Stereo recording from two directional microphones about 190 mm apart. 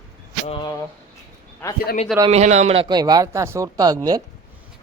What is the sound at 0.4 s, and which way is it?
Speech, 30° left (ahead or behind).